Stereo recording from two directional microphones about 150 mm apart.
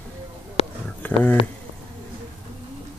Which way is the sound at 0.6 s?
40° left (ahead or behind).